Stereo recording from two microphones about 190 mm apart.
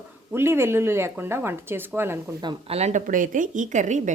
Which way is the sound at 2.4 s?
35° right (ahead or behind).